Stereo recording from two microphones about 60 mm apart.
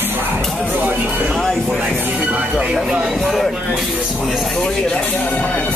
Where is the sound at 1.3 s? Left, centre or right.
Centre.